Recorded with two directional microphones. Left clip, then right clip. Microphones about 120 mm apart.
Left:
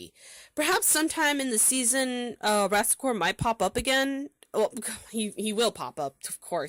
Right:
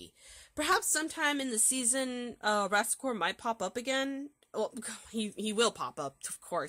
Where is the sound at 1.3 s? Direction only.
55° left (ahead or behind).